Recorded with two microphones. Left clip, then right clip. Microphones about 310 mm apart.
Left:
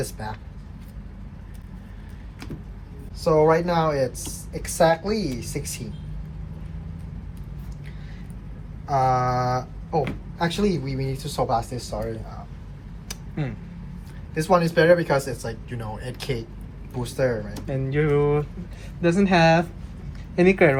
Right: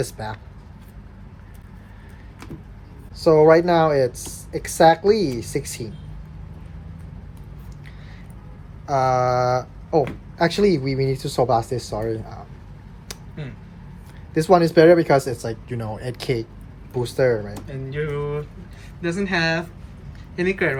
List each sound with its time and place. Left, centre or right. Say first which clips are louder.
0.0 s speech: right 3 dB; right
3.2 s speech: right 5 dB; right
8.9 s a sound: right 2 dB; centre
10.4 s speech: right 6 dB; right
14.3 s speech: right 5 dB; right
17.9 s speech: left 5 dB; centre